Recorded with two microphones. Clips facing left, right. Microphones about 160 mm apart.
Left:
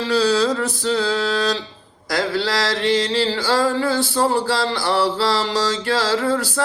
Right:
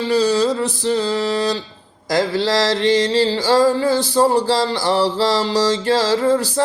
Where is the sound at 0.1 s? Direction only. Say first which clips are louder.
Right 1 dB; 15° right (ahead or behind).